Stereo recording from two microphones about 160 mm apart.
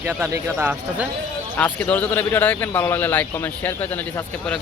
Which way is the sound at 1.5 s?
10° left (ahead or behind).